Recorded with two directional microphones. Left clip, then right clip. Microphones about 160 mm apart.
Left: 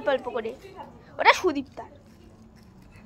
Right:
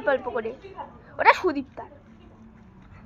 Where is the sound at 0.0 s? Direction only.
30° left (ahead or behind).